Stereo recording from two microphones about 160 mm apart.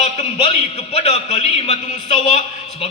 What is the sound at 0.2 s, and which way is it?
A man's voice, 30° left (ahead or behind).